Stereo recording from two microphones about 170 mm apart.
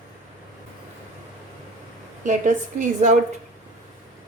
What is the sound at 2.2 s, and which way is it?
Speech, 45° right (ahead or behind).